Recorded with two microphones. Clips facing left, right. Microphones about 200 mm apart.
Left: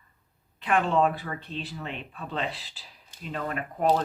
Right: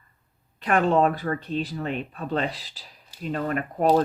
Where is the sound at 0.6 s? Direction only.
40° right (ahead or behind).